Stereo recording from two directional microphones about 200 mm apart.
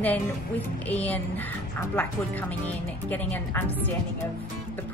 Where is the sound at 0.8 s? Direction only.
10° left (ahead or behind).